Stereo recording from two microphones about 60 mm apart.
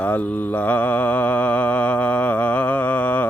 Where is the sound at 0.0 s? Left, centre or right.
Left.